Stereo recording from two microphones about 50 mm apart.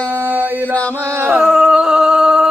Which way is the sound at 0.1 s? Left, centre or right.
Right.